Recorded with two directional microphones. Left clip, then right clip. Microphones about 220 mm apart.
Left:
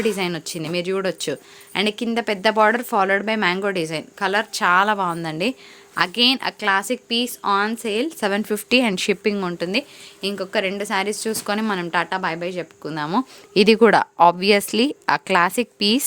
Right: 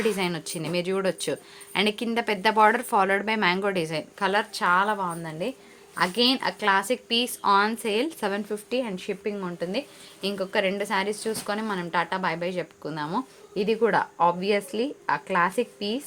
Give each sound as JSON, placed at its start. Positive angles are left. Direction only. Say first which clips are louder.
{"t": 0.0, "sound": "speech", "louder": "left 4 dB", "side_deg": 25}
{"t": 8.3, "sound": "speech", "louder": "left 9 dB", "side_deg": 35}
{"t": 10.2, "sound": "speech", "louder": "left 3 dB", "side_deg": 30}
{"t": 13.5, "sound": "speech", "louder": "left 9 dB", "side_deg": 50}